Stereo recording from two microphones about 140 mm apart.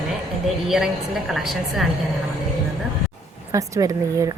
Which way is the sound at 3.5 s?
25° right (ahead or behind).